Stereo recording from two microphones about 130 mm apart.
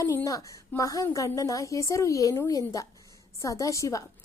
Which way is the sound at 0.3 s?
25° left (ahead or behind).